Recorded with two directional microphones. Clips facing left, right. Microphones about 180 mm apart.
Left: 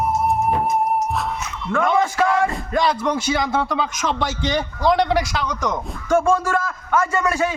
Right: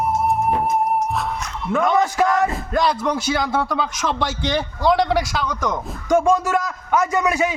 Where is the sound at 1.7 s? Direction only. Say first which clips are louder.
Right 1 dB; 5° right (ahead or behind).